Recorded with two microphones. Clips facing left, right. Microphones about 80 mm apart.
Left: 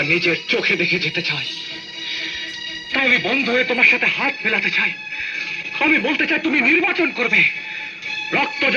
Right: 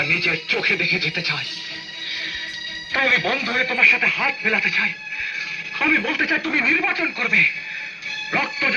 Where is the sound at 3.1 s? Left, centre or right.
Right.